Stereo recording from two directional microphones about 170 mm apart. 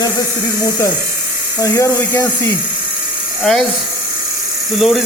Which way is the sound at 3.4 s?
Centre (ahead or behind).